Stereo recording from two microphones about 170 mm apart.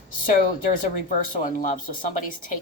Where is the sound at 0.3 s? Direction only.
55° left (ahead or behind).